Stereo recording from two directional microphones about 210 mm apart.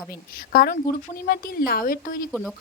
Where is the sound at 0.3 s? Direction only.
45° left (ahead or behind).